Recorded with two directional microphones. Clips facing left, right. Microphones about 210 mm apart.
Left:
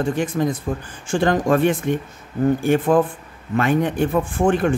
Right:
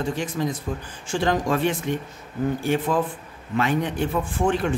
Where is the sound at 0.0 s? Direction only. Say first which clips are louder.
Left 5 dB; 50° left (ahead or behind).